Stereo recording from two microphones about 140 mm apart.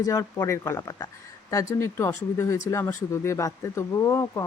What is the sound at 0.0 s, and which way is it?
Speech, 20° left (ahead or behind).